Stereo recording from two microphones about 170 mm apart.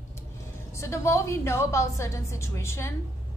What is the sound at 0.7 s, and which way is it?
A woman's voice, 15° left (ahead or behind).